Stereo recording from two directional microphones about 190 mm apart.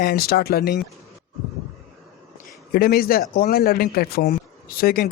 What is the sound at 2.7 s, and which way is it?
Speech, 50° left (ahead or behind).